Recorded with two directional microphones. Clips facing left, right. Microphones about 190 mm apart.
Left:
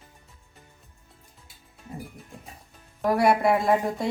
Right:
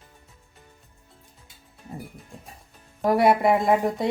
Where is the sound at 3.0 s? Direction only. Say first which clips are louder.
Right 2 dB; 20° right (ahead or behind).